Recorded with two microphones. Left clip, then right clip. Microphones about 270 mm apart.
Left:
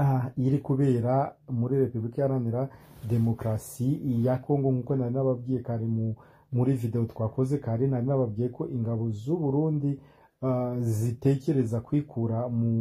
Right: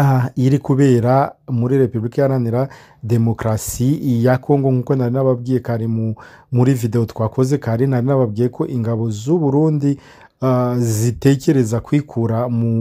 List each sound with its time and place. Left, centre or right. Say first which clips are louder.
0.0 s speech: right 11 dB; right
11.7 s speech: right 11 dB; right